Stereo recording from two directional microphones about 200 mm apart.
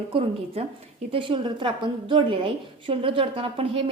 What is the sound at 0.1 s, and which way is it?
A woman's voice, 30° right (ahead or behind).